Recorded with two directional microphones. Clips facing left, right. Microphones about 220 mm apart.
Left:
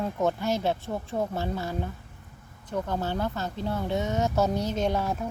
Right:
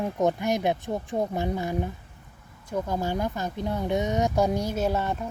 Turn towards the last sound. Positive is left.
turn(degrees=0)  # may be behind; listen again after turning